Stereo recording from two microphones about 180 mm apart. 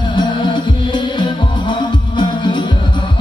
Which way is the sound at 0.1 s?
25° left (ahead or behind).